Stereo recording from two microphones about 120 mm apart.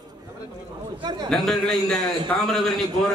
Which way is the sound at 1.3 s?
5° left (ahead or behind).